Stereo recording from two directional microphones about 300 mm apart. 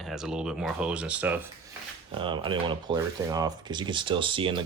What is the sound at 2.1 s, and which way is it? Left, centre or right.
Speech, centre.